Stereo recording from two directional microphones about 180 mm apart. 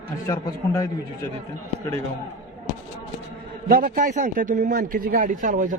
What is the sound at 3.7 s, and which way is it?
A man's voice, 50° right (ahead or behind).